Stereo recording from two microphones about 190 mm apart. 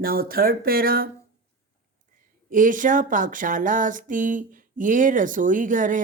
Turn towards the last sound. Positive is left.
turn(degrees=-45)  # may be behind; listen again after turning